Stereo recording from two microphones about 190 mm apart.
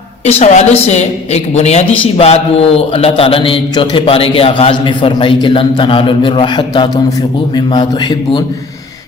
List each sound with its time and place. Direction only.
0.3 s a woman's voice: 35° left (ahead or behind)